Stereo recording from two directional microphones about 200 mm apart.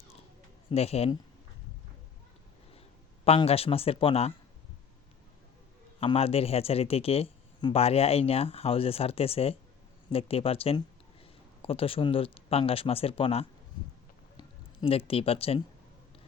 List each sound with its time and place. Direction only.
0.7 s speech: 30° left (ahead or behind)
3.2 s speech: 30° left (ahead or behind)
6.0 s speech: 30° left (ahead or behind)